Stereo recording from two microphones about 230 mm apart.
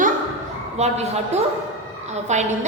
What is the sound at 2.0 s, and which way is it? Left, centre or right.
Speech, right.